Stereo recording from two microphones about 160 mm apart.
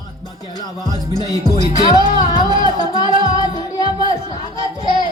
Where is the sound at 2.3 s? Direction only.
25° left (ahead or behind).